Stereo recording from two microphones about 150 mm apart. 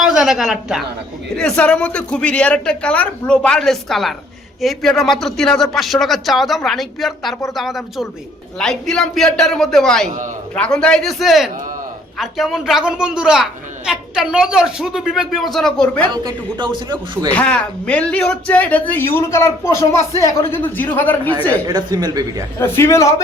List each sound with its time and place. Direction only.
0.0 s a woman's voice: 5° right (ahead or behind)
16.1 s speech: 30° right (ahead or behind)
17.3 s a man's voice: 10° left (ahead or behind)
21.7 s speech: 25° right (ahead or behind)
22.5 s a man's voice: 15° left (ahead or behind)